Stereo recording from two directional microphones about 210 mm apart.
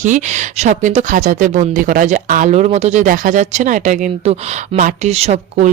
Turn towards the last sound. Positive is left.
turn(degrees=-30)  # may be behind; listen again after turning